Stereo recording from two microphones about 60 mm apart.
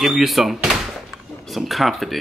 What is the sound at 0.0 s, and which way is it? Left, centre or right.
A man's voice, centre.